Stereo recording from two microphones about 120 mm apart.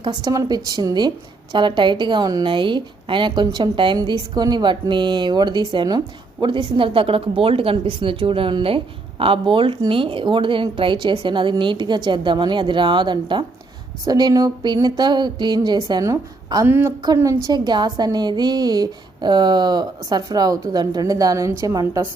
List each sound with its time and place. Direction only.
0.0 s a woman's voice: 35° right (ahead or behind)
16.6 s a woman's voice: 15° right (ahead or behind)
17.2 s a woman's voice: 30° right (ahead or behind)